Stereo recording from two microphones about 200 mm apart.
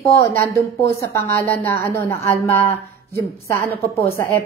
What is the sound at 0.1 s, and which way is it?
A woman's voice, 15° left (ahead or behind).